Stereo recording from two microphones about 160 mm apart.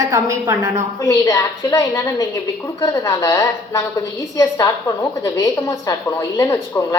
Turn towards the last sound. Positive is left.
turn(degrees=20)  # may be behind; listen again after turning